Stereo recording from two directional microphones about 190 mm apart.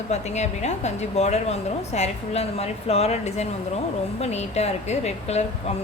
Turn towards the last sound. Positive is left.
turn(degrees=35)  # may be behind; listen again after turning